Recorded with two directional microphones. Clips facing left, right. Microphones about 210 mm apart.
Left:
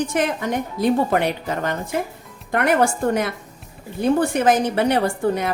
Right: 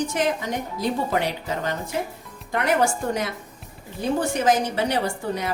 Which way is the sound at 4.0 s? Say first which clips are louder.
Left 5 dB; 60° left (ahead or behind).